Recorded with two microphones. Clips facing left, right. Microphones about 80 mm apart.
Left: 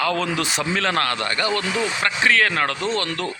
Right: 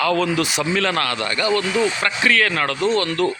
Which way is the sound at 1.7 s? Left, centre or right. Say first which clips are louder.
Right 3 dB; centre.